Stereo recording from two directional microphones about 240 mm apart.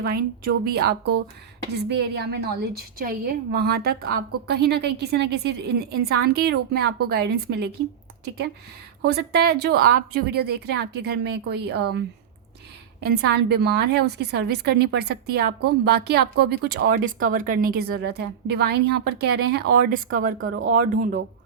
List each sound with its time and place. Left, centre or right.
0.0 s a woman's voice: right
9.0 s a woman's voice: right